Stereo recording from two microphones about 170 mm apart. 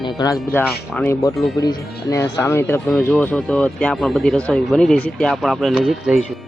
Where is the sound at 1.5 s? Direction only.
20° left (ahead or behind); by 6.2 s 5° right (ahead or behind).